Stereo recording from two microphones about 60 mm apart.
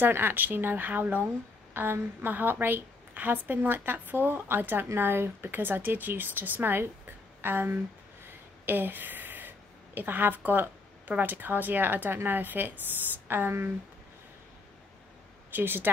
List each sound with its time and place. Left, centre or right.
0.0 s a woman's voice: right
15.5 s a woman's voice: right